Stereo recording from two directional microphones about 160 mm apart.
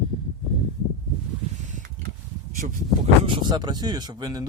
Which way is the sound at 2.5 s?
55° right (ahead or behind).